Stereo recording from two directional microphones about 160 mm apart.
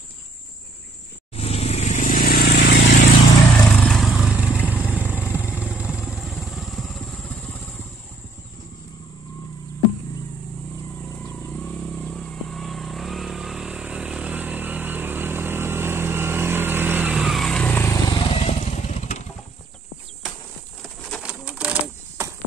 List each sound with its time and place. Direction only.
1.3 s vehicle: 40° left (ahead or behind); by 2.8 s 80° left
3.5 s vehicle: 5° left (ahead or behind)
11.6 s vehicle: 5° left (ahead or behind)
18.2 s motorcycle: 35° left (ahead or behind)
21.1 s bird: 5° right (ahead or behind)